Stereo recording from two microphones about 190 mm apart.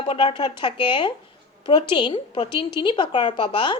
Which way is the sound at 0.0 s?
25° left (ahead or behind).